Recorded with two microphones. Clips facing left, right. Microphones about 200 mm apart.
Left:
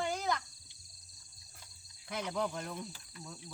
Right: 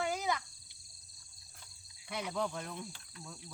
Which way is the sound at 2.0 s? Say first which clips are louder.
Left 1 dB; centre (ahead or behind).